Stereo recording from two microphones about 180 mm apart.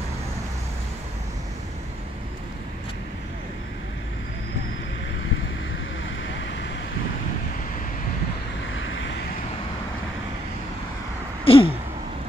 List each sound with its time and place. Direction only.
6.0 s vehicle: 90° left
8.7 s vehicle: 90° left
11.4 s a sound: 30° left (ahead or behind)